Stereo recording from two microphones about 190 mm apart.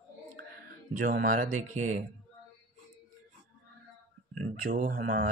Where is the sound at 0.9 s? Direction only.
45° right (ahead or behind).